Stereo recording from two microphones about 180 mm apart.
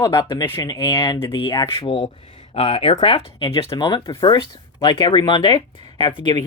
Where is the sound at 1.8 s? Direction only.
30° left (ahead or behind).